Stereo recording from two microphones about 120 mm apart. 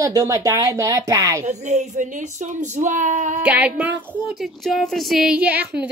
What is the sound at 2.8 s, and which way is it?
Female singing, 90° right.